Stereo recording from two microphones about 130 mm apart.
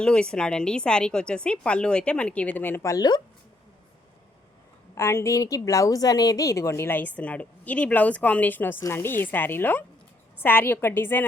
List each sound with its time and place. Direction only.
0.0 s a woman's voice: 5° left (ahead or behind); by 3.2 s 30° left (ahead or behind)
4.9 s a woman's voice: 20° left (ahead or behind)